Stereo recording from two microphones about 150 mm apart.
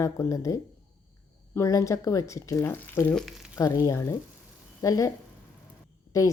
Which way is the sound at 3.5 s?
25° left (ahead or behind).